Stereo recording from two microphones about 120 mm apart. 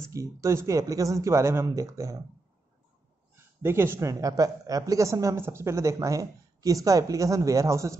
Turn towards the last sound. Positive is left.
turn(degrees=-25)  # may be behind; listen again after turning